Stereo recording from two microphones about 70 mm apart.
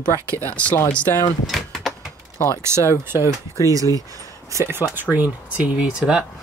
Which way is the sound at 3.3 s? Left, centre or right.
Left.